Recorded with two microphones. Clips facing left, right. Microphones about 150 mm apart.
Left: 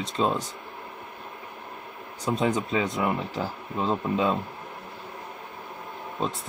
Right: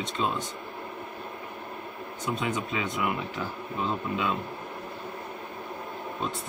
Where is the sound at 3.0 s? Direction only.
35° left (ahead or behind).